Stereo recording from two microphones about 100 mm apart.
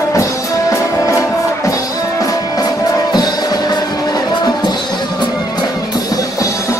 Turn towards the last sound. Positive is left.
turn(degrees=35)  # may be behind; listen again after turning